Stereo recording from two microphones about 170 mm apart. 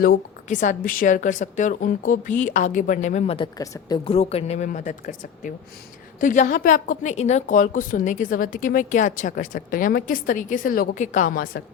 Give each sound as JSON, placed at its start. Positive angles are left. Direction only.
{"t": 0.4, "sound": "a woman's voice", "side_deg": 45}